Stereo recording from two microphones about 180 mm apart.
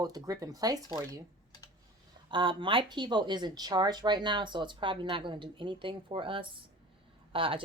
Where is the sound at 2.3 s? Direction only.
25° right (ahead or behind).